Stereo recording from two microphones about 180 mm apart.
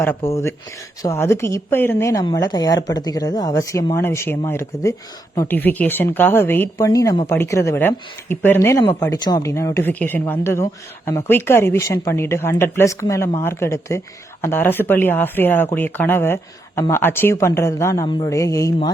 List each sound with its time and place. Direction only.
0.2 s a woman's voice: 15° left (ahead or behind)